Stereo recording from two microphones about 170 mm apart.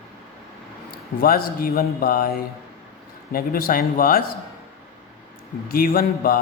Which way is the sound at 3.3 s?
60° left (ahead or behind).